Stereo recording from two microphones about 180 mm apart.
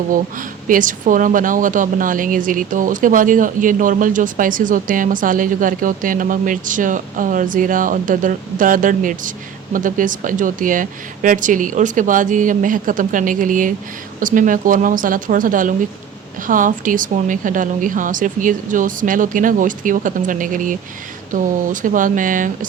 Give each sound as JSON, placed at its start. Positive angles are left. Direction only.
{"t": 0.1, "sound": "speech", "side_deg": -50}